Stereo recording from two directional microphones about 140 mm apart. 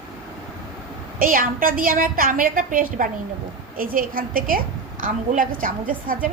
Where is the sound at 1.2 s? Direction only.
90° right.